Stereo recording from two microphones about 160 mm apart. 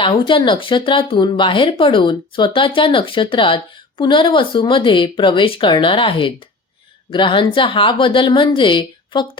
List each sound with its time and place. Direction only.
0.0 s speech: 30° left (ahead or behind)